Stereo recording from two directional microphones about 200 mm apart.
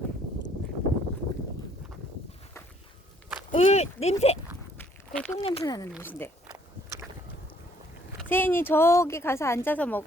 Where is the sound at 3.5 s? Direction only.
35° left (ahead or behind).